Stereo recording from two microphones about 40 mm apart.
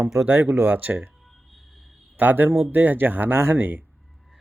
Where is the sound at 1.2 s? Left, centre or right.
Centre.